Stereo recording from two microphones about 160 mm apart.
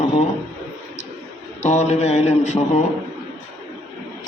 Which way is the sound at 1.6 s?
45° left (ahead or behind).